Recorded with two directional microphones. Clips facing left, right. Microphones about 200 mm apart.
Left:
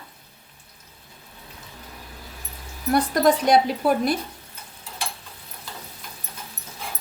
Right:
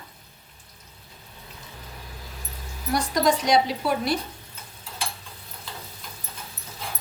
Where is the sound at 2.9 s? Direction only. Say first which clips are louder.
Left 3 dB; 55° left (ahead or behind).